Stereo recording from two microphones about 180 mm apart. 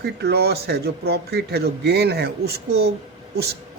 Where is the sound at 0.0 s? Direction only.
65° right (ahead or behind).